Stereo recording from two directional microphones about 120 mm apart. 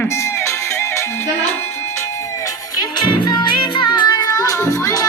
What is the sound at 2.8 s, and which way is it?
Music, 35° left (ahead or behind).